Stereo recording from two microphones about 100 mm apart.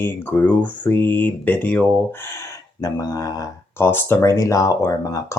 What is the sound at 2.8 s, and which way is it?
Speech, 35° left (ahead or behind).